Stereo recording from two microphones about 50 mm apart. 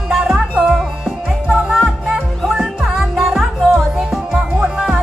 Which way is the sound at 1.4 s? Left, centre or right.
Centre.